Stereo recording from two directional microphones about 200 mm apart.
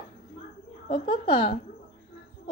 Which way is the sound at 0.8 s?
25° left (ahead or behind).